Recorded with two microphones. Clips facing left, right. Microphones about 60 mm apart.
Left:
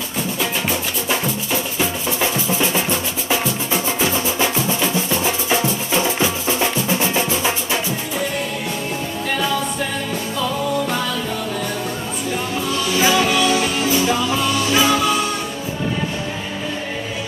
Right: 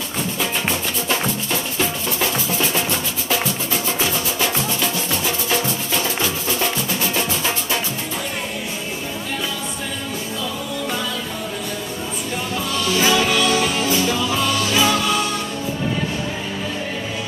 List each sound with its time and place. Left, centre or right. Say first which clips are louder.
0.4 s music: even; centre
3.3 s music: left 2 dB; left
12.7 s music: left 1 dB; centre